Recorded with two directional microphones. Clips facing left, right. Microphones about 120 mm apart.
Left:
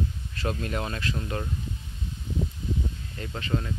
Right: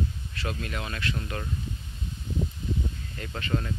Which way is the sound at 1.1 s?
15° left (ahead or behind).